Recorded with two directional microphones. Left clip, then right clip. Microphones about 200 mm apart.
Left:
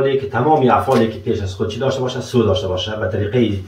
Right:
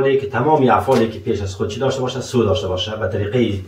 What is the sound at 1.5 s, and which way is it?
Speech, 15° left (ahead or behind).